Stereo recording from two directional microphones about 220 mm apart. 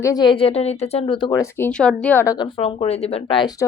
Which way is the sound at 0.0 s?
15° left (ahead or behind).